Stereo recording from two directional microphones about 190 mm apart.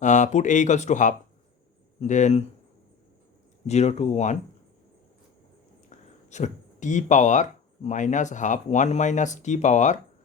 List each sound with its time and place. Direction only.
0.0 s speech: 40° left (ahead or behind)
3.7 s speech: 35° left (ahead or behind)
5.9 s speech: 40° left (ahead or behind)